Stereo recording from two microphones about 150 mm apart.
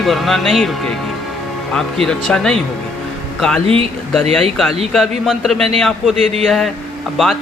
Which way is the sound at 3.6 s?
40° right (ahead or behind).